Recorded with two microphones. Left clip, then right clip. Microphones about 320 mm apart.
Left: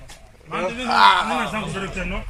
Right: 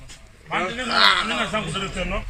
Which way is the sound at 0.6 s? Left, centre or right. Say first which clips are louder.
Left 3 dB; centre.